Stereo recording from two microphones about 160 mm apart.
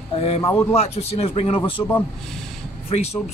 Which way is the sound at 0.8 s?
40° left (ahead or behind).